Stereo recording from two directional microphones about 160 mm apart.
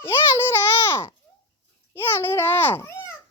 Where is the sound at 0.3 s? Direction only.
15° left (ahead or behind).